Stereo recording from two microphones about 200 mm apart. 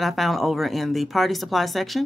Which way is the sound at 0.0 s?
Centre (ahead or behind).